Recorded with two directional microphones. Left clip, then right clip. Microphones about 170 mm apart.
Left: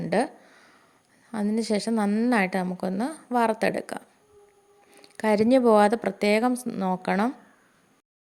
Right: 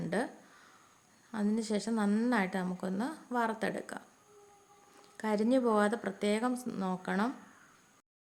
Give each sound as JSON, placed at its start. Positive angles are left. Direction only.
{"t": 0.1, "sound": "a sound", "side_deg": 40}
{"t": 1.5, "sound": "speech", "side_deg": 40}
{"t": 2.0, "sound": "a woman's voice", "side_deg": 30}
{"t": 2.3, "sound": "speech", "side_deg": 40}